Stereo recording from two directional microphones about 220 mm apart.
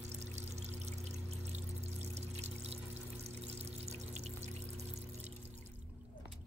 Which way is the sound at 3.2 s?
30° right (ahead or behind).